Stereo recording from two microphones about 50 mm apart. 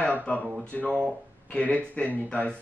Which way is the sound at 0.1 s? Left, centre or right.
Left.